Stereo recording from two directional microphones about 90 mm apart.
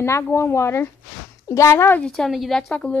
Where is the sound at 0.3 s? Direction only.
30° left (ahead or behind).